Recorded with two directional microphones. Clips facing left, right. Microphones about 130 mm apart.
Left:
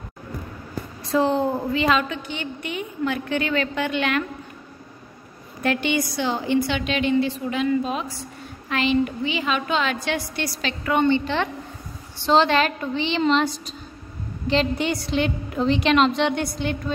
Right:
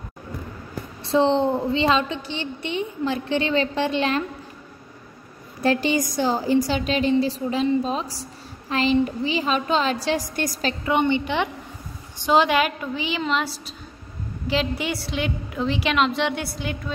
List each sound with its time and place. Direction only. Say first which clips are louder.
1.0 s a woman's voice: right 2 dB; 30° right (ahead or behind)
1.4 s a woman's voice: right 2 dB; centre (ahead or behind)
1.7 s a woman's voice: right 1 dB; 30° right (ahead or behind)
5.6 s a woman's voice: right 2 dB; 35° right (ahead or behind)
10.9 s a woman's voice: left 2 dB; 15° right (ahead or behind)